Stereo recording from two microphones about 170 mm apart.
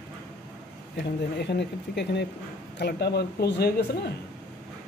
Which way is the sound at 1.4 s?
80° left.